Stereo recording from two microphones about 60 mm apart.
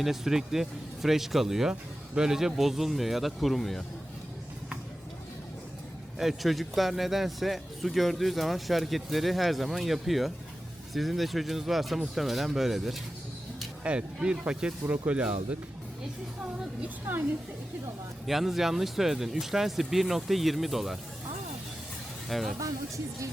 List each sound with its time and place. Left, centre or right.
0.0 s speech: centre
6.1 s speech: centre
13.8 s speech: centre
18.3 s speech: centre
22.3 s speech: centre